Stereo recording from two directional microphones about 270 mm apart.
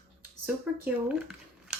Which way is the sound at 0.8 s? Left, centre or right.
Centre.